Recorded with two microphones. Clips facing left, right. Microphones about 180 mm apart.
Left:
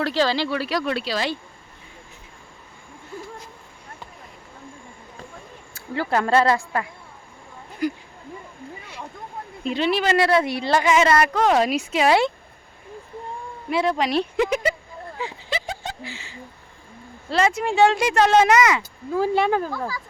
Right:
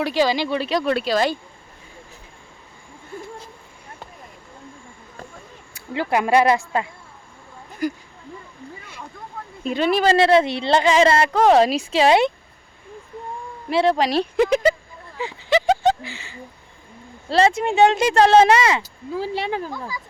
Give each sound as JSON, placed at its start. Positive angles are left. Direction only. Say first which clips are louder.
{"t": 0.0, "sound": "speech", "louder": "right 2 dB", "side_deg": -15}
{"t": 0.9, "sound": "speech", "louder": "right 5 dB", "side_deg": -50}
{"t": 5.7, "sound": "speech", "louder": "right 1 dB", "side_deg": -15}
{"t": 7.8, "sound": "a sound", "louder": "even", "side_deg": -45}
{"t": 9.6, "sound": "speech", "louder": "right 3 dB", "side_deg": -45}
{"t": 10.1, "sound": "a woman's voice", "louder": "right 5 dB", "side_deg": -25}
{"t": 13.7, "sound": "speech", "louder": "right 3 dB", "side_deg": -30}
{"t": 15.4, "sound": "a sound", "louder": "right 17 dB", "side_deg": -75}
{"t": 17.2, "sound": "a woman's voice", "louder": "right 3 dB", "side_deg": -30}
{"t": 18.8, "sound": "speech", "louder": "left 4 dB", "side_deg": 50}